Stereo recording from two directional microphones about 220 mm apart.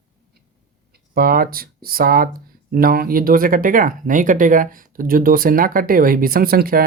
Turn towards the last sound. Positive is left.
turn(degrees=-40)  # may be behind; listen again after turning